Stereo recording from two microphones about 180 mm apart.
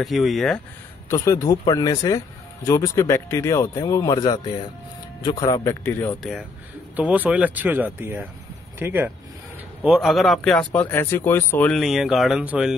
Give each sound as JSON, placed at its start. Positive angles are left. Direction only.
{"t": 0.0, "sound": "speech", "side_deg": 0}
{"t": 1.0, "sound": "a man's voice", "side_deg": 15}
{"t": 7.0, "sound": "speech", "side_deg": -10}